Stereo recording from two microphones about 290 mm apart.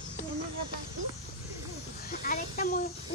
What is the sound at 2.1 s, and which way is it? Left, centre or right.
Speech, left.